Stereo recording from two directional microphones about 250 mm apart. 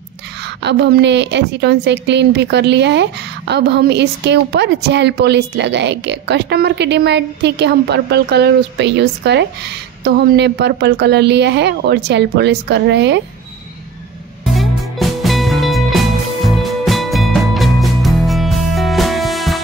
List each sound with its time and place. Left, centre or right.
0.6 s a woman's voice: right
14.4 s music: centre